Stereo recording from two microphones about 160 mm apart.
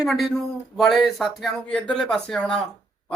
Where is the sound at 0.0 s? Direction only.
Centre (ahead or behind).